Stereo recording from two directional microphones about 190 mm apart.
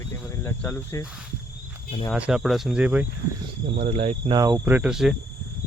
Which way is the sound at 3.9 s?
35° right (ahead or behind).